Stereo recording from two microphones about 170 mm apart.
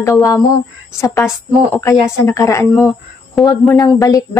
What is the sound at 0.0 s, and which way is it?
A woman's voice, 20° left (ahead or behind).